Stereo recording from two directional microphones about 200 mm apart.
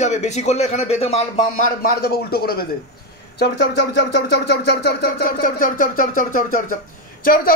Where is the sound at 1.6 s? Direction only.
50° left (ahead or behind).